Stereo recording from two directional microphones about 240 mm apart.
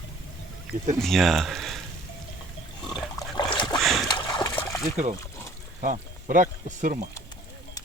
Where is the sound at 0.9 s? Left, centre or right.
Centre.